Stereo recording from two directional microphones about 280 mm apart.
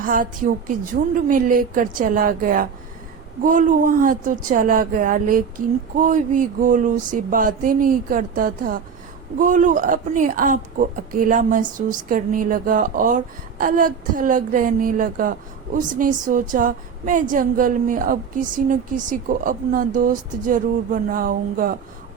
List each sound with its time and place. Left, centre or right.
0.0 s speech: right